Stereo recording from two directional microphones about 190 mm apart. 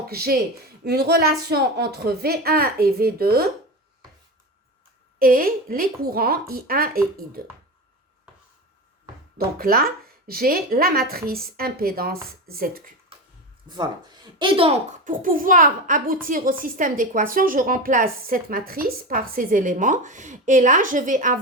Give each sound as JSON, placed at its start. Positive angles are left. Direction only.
{"t": 0.1, "sound": "a woman's voice", "side_deg": -55}
{"t": 5.2, "sound": "a child's voice", "side_deg": -50}
{"t": 9.6, "sound": "a child's voice", "side_deg": -50}
{"t": 13.7, "sound": "a child's voice", "side_deg": -20}